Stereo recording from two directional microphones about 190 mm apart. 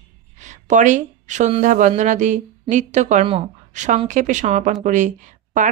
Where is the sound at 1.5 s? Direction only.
40° right (ahead or behind).